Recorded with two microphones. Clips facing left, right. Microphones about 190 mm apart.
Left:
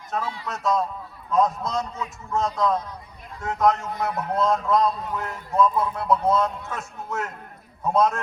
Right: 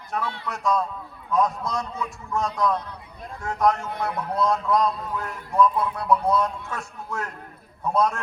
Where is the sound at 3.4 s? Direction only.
20° left (ahead or behind).